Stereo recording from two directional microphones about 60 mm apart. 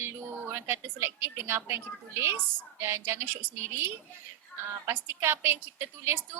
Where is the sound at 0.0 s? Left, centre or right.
Right.